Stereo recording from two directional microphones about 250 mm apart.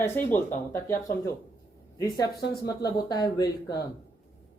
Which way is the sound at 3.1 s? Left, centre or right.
Centre.